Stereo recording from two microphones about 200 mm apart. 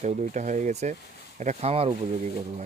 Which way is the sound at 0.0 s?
35° right (ahead or behind).